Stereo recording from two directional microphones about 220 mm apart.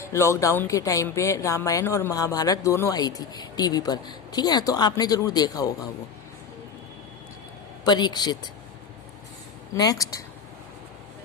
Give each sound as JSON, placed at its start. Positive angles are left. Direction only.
{"t": 0.0, "sound": "speech", "side_deg": 10}
{"t": 7.9, "sound": "speech", "side_deg": 20}
{"t": 9.7, "sound": "speech", "side_deg": 15}